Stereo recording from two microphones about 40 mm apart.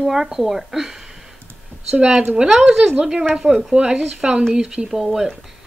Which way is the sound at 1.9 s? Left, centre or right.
Right.